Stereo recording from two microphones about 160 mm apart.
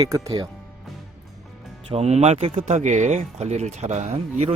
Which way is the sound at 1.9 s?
40° right (ahead or behind).